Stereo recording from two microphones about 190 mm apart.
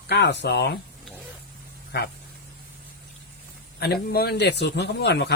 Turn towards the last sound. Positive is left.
turn(degrees=60)  # may be behind; listen again after turning